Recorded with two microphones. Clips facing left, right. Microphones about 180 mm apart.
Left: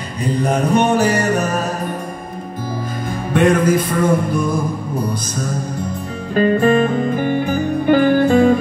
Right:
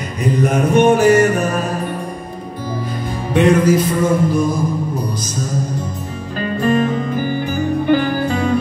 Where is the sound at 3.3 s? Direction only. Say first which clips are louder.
Right 1 dB; 50° left (ahead or behind).